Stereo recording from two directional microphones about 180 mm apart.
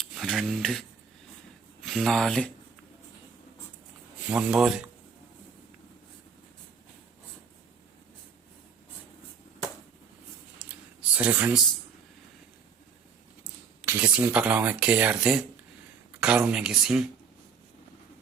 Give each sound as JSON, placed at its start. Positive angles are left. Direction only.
{"t": 0.0, "sound": "speech", "side_deg": 0}
{"t": 4.3, "sound": "speech", "side_deg": -5}
{"t": 10.6, "sound": "a sound", "side_deg": -10}
{"t": 13.8, "sound": "speech", "side_deg": -10}
{"t": 16.5, "sound": "speech", "side_deg": -5}